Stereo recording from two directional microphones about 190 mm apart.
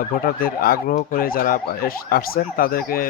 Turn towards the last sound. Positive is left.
turn(degrees=50)  # may be behind; listen again after turning